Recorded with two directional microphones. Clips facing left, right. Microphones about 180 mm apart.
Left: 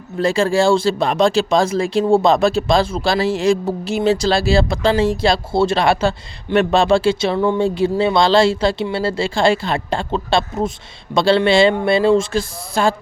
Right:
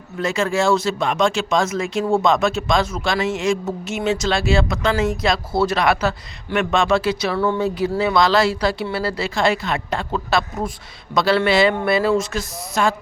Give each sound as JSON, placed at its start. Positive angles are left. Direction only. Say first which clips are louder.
{"t": 0.2, "sound": "speech", "louder": "left 5 dB", "side_deg": 30}